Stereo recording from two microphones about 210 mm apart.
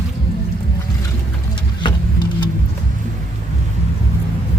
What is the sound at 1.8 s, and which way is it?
Vehicle, 20° left (ahead or behind).